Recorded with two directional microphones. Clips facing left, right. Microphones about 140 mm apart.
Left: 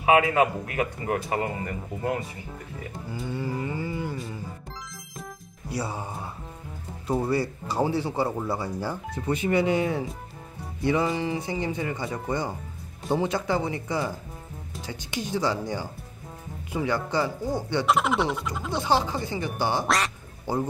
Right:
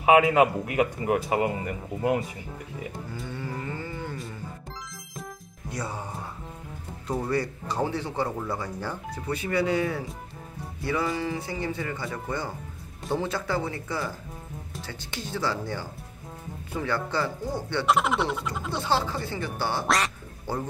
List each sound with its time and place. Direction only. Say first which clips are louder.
0.0 s speech: right 2 dB; 20° right (ahead or behind)
3.3 s speech: left 5 dB; 10° left (ahead or behind)
5.2 s music: right 1 dB; 10° left (ahead or behind)
7.1 s speech: left 2 dB; 10° left (ahead or behind)
9.1 s speech: left 4 dB; 20° left (ahead or behind)
17.8 s speech: right 1 dB; centre (ahead or behind)
18.7 s speech: left 3 dB; 15° left (ahead or behind)